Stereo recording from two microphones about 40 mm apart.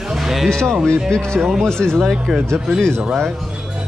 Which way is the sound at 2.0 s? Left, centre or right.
Centre.